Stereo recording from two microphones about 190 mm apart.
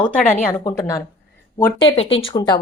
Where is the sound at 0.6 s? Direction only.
15° left (ahead or behind).